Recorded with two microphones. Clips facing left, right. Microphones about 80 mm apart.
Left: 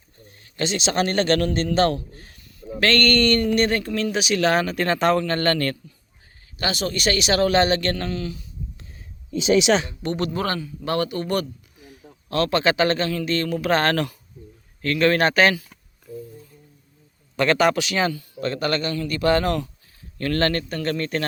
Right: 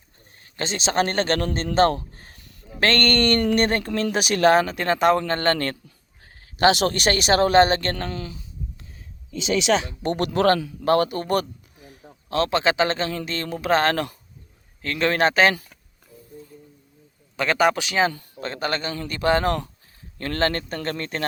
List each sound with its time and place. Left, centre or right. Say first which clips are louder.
0.4 s a man's voice: left 2 dB; right
4.5 s speech: right 1 dB; right
6.4 s speech: right 8 dB; right
10.0 s speech: right 1 dB; right
10.2 s a man's voice: right 6 dB; right
10.8 s speech: right 4 dB; right
12.3 s speech: left 1 dB; right
17.3 s speech: left 1 dB; centre
17.7 s speech: right 1 dB; right
20.1 s speech: left 2 dB; right